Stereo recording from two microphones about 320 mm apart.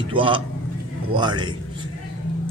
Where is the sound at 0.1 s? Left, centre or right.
Centre.